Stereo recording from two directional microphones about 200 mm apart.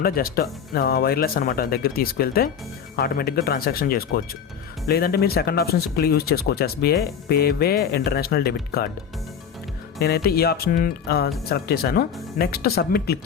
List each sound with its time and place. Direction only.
0.0 s speech: 50° left (ahead or behind)
10.0 s speech: 50° left (ahead or behind)